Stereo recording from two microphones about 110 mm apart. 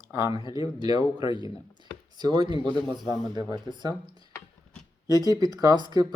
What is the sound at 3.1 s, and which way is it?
Speech, 40° right (ahead or behind).